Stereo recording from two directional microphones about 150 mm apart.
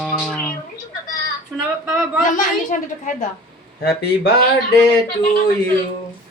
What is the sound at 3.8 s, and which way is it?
Speech, 90° left.